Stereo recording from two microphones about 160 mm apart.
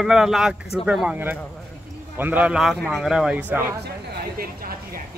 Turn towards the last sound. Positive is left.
turn(degrees=-65)  # may be behind; listen again after turning